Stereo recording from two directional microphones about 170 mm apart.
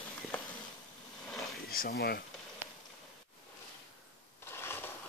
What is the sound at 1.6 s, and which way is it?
Speech, 65° left (ahead or behind).